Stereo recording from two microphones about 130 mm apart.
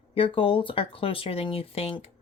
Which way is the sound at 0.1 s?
45° left (ahead or behind).